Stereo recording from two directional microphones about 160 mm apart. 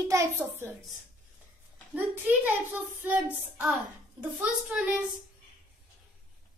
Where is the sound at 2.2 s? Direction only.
10° right (ahead or behind).